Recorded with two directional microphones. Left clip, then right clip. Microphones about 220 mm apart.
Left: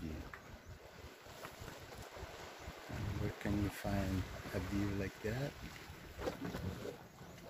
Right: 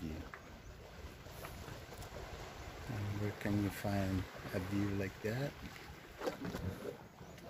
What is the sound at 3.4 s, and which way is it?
Speech, 15° right (ahead or behind).